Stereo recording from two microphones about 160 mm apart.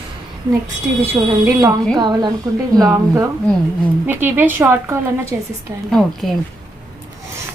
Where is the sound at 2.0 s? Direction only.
30° right (ahead or behind).